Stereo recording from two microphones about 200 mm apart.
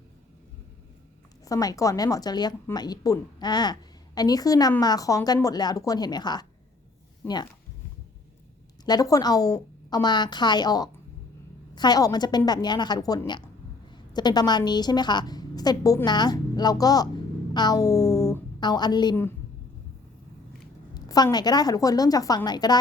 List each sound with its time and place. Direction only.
1.5 s a woman's voice: 15° left (ahead or behind)
8.8 s a woman's voice: 20° left (ahead or behind)
20.9 s a woman's voice: 20° left (ahead or behind)